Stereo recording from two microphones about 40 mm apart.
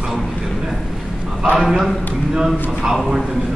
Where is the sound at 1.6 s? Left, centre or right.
Centre.